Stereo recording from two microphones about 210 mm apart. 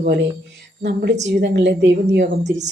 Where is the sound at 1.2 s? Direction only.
55° right (ahead or behind).